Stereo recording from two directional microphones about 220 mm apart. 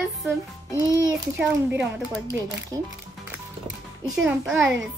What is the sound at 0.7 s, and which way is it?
Speech, 15° left (ahead or behind).